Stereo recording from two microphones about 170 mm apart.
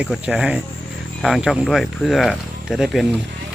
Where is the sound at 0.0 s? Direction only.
5° right (ahead or behind).